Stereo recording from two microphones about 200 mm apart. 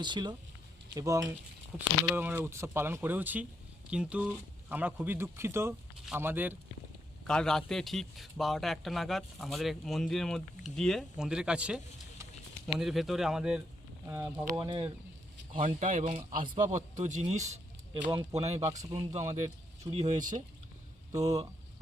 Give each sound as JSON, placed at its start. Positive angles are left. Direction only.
{"t": 0.0, "sound": "a man's voice", "side_deg": -20}
{"t": 7.3, "sound": "a man's voice", "side_deg": 5}
{"t": 14.5, "sound": "speech", "side_deg": -25}
{"t": 15.5, "sound": "speech", "side_deg": -40}
{"t": 18.7, "sound": "a man's voice", "side_deg": -15}
{"t": 19.1, "sound": "speech", "side_deg": -35}